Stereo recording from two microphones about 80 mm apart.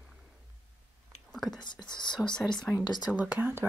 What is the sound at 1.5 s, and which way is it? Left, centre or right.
Speech, left.